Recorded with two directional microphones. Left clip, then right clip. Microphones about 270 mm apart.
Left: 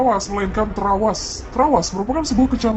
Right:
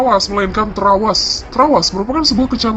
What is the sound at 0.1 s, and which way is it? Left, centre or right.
Speech, centre.